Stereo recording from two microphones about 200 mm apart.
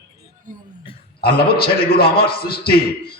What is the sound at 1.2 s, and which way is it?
A man's voice, 50° left (ahead or behind).